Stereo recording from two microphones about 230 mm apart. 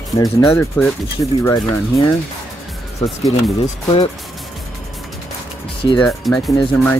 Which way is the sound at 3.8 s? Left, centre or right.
Centre.